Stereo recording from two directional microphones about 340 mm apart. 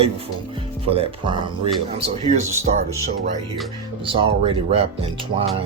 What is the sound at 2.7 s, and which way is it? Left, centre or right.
Speech, right.